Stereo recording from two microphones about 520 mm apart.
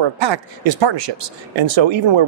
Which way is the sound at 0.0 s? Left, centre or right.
Right.